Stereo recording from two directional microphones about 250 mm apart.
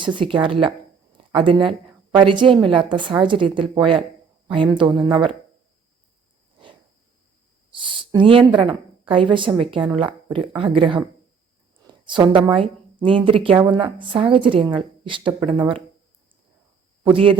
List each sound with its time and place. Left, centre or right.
0.0 s a woman's voice: centre
1.1 s a sound: centre
2.1 s a woman's voice: centre
7.7 s a woman's voice: centre
12.0 s a woman's voice: centre
17.0 s speech: right